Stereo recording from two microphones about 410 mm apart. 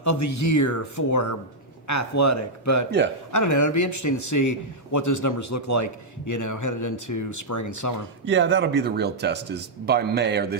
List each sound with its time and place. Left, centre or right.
0.0 s a man's voice: left
8.2 s speech: right